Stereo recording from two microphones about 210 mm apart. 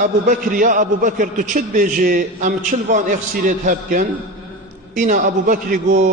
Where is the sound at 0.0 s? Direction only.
40° right (ahead or behind).